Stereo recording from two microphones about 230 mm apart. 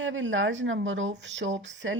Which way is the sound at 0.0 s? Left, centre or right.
Right.